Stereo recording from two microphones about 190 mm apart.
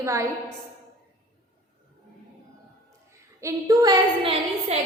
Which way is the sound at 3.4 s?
15° right (ahead or behind).